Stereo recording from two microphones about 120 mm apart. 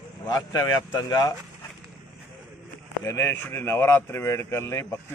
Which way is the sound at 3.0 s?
25° left (ahead or behind).